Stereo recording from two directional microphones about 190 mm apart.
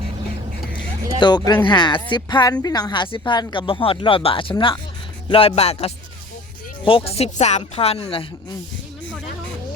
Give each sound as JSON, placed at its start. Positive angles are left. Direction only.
{"t": 1.2, "sound": "speech", "side_deg": 20}